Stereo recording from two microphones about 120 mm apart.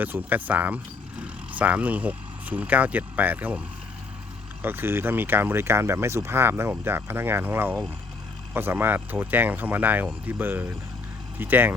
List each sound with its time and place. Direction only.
0.0 s speech: 15° right (ahead or behind)
4.6 s speech: 20° right (ahead or behind)